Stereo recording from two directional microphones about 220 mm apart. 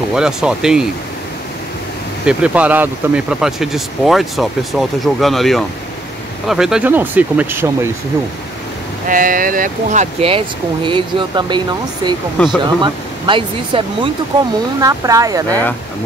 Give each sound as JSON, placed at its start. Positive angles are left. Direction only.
{"t": 0.1, "sound": "speech", "side_deg": -5}
{"t": 2.2, "sound": "speech", "side_deg": -5}
{"t": 9.1, "sound": "speech", "side_deg": -40}